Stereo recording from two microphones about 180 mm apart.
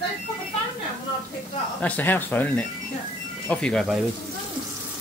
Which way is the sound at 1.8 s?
10° left (ahead or behind).